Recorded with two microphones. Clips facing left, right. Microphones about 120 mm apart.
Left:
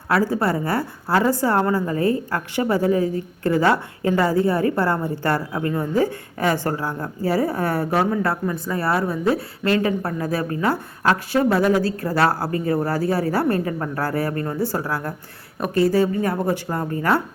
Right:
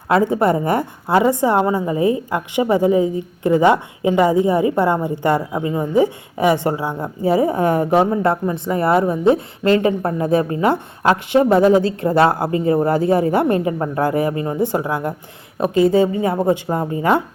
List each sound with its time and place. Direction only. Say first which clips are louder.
0.1 s a woman's voice: right 5 dB; 20° right (ahead or behind)